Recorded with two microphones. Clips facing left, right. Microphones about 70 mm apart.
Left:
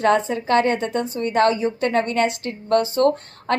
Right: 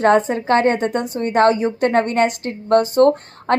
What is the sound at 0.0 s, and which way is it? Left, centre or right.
A woman's voice, right.